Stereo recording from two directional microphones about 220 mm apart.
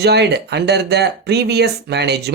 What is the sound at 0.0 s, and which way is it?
Speech, 50° right (ahead or behind).